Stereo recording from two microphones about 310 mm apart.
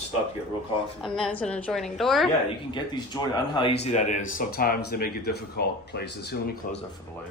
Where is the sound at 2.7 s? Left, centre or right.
Centre; by 6.8 s left.